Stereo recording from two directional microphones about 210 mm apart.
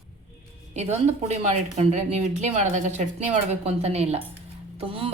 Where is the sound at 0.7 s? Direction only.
30° right (ahead or behind).